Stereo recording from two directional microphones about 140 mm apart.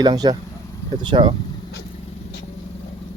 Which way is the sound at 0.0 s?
30° right (ahead or behind).